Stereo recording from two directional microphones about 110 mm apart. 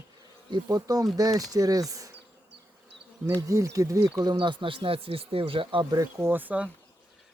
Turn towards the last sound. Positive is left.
turn(degrees=-15)  # may be behind; listen again after turning